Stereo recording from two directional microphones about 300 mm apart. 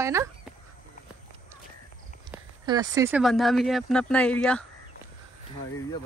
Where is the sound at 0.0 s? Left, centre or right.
Centre.